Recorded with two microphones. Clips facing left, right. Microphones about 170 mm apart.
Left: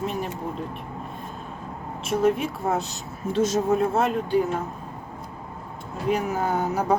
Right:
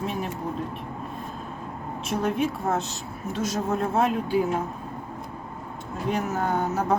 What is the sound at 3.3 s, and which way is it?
Speech, 25° left (ahead or behind).